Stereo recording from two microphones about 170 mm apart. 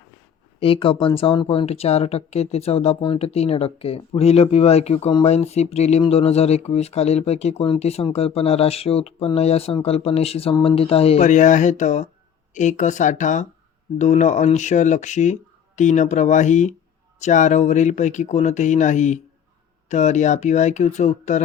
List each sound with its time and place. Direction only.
0.6 s speech: 30° left (ahead or behind)